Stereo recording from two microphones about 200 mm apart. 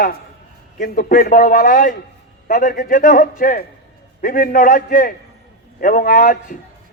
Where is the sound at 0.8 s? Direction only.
45° left (ahead or behind).